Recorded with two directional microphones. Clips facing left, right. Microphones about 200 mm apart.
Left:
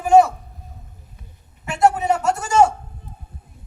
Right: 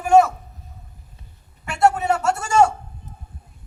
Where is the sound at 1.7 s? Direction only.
20° left (ahead or behind).